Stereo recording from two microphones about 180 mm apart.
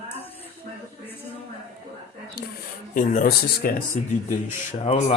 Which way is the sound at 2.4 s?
65° left (ahead or behind).